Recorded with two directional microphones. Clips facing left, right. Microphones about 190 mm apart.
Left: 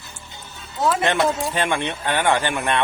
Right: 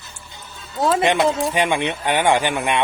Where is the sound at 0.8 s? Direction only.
15° right (ahead or behind).